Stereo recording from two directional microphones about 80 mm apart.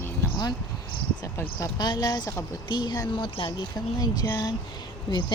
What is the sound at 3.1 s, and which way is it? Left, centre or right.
Speech, left.